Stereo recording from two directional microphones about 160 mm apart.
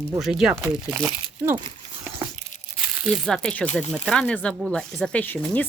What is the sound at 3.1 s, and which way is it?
Speech, centre (ahead or behind).